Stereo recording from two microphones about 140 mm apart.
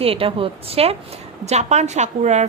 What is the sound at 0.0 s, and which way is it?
A woman's voice, 40° right (ahead or behind).